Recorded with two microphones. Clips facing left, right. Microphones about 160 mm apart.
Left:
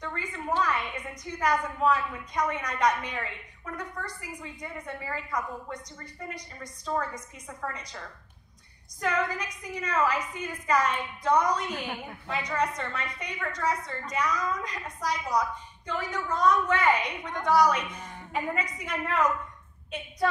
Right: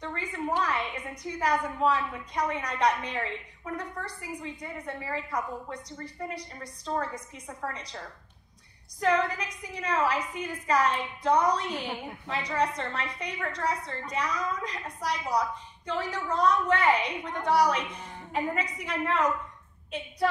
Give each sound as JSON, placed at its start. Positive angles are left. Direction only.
{"t": 0.0, "sound": "a sound", "side_deg": -30}
{"t": 2.6, "sound": "a woman's voice", "side_deg": -30}
{"t": 9.0, "sound": "a woman's voice", "side_deg": -30}
{"t": 11.7, "sound": "a woman's voice", "side_deg": 0}
{"t": 12.3, "sound": "a woman's voice", "side_deg": -30}
{"t": 17.7, "sound": "a woman's voice", "side_deg": 0}
{"t": 18.3, "sound": "a woman's voice", "side_deg": -30}